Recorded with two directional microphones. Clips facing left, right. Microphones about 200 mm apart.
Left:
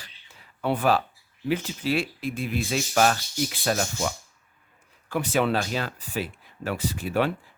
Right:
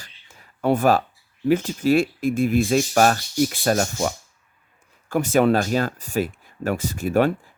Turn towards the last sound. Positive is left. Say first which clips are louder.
# right 5 dB
turn(degrees=-45)  # may be behind; listen again after turning